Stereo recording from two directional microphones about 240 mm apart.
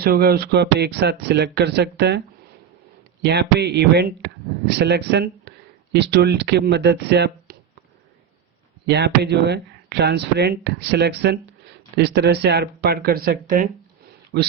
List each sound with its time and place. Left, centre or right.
0.0 s speech: right
8.9 s speech: right